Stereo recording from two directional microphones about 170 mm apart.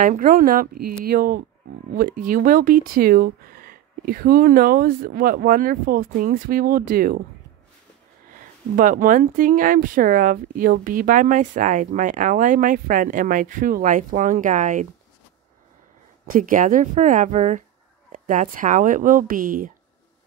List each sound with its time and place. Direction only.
0.0 s speech: 55° right (ahead or behind)
8.7 s speech: 50° right (ahead or behind)
16.3 s speech: 50° right (ahead or behind)